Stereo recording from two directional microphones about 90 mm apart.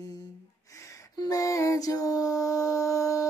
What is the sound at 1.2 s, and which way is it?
Mantra, 40° left (ahead or behind).